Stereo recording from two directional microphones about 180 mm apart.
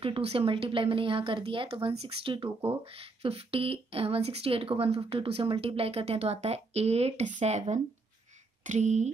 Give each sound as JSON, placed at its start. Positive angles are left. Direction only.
{"t": 0.0, "sound": "speech", "side_deg": -30}